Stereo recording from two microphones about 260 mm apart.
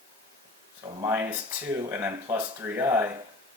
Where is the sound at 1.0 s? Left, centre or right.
Centre.